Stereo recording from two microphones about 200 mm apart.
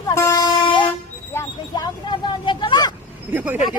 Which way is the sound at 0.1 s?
15° left (ahead or behind).